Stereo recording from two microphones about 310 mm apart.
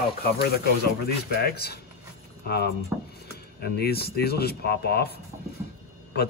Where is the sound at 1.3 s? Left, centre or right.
Left.